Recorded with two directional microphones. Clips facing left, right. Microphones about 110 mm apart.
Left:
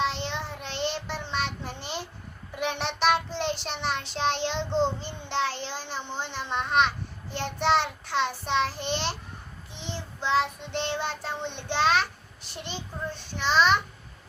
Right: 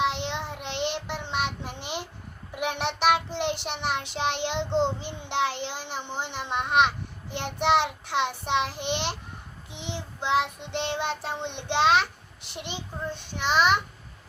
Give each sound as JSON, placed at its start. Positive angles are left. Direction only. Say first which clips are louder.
{"t": 0.0, "sound": "child singing", "louder": "right 2 dB", "side_deg": -15}